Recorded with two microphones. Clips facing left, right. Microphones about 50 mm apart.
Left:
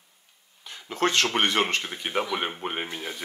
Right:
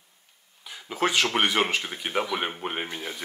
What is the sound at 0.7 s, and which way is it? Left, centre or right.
Speech, centre.